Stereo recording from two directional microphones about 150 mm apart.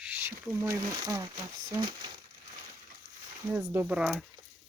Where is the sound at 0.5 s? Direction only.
25° right (ahead or behind).